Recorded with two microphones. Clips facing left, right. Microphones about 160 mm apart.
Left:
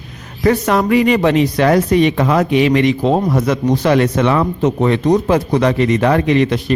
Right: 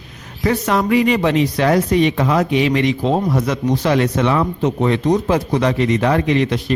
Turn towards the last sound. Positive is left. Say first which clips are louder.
# left 3 dB
turn(degrees=55)  # may be behind; listen again after turning